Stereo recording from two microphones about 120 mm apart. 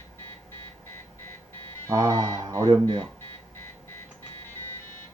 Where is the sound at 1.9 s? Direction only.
30° right (ahead or behind).